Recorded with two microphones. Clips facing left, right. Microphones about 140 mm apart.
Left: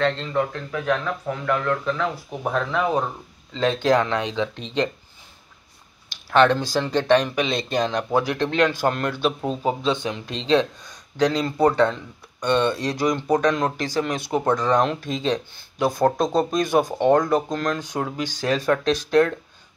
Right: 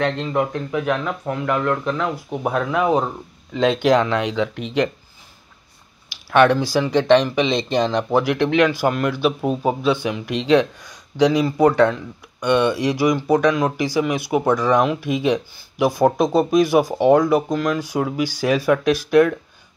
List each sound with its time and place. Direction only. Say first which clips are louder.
0.0 s a man's voice: right 2 dB; 15° right (ahead or behind)
6.0 s speech: right 2 dB; 10° right (ahead or behind)
7.2 s speech: right 4 dB; 5° left (ahead or behind)
7.8 s a man's voice: right 2 dB; 10° right (ahead or behind)